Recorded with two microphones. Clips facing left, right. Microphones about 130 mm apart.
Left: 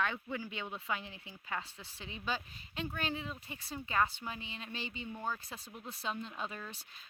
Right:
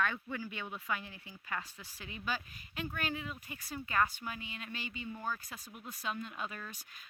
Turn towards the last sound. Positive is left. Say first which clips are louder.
# left 1 dB
turn(degrees=30)  # may be behind; listen again after turning